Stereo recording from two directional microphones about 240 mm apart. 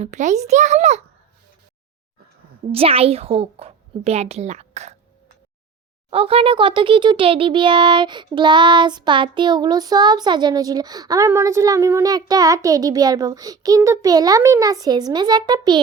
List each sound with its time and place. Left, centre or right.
0.0 s a woman's voice: right
2.7 s a woman's voice: right
6.1 s a child's voice: right